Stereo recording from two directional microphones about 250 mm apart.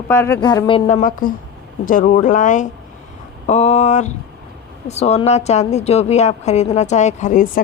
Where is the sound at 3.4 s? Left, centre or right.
Left.